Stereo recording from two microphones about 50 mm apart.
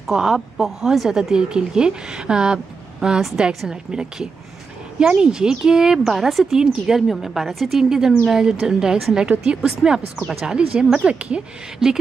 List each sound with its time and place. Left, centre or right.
0.0 s speech: centre